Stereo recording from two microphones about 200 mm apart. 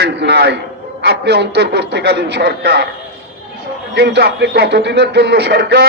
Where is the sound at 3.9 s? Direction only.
55° right (ahead or behind).